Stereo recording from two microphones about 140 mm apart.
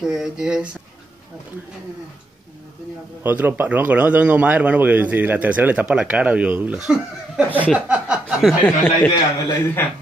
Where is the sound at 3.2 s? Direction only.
15° right (ahead or behind).